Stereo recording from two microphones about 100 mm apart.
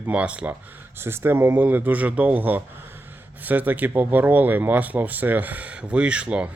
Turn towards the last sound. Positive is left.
turn(degrees=-10)  # may be behind; listen again after turning